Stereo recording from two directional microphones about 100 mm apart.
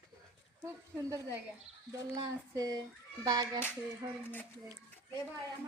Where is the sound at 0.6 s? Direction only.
30° right (ahead or behind).